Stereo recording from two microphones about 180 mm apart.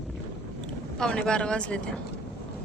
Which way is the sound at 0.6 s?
5° left (ahead or behind).